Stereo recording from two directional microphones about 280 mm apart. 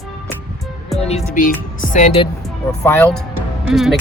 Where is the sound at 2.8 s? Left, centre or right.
Centre.